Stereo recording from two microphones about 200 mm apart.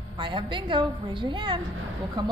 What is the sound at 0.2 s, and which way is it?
A woman's voice, 25° right (ahead or behind).